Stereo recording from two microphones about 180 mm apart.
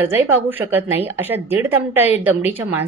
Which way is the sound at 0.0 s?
10° right (ahead or behind).